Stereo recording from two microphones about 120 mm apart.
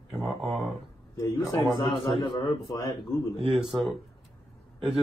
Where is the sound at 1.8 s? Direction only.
40° left (ahead or behind).